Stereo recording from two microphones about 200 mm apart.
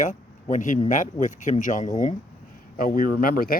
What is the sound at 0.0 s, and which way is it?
Speech, 40° left (ahead or behind).